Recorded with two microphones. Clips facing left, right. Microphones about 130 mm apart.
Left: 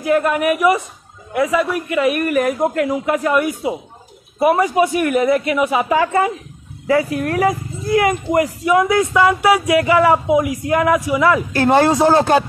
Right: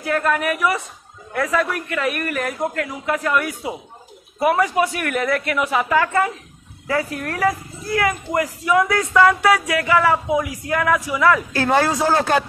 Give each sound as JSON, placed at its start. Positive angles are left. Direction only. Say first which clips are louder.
{"t": 0.0, "sound": "a man's voice", "louder": "left 5 dB", "side_deg": 15}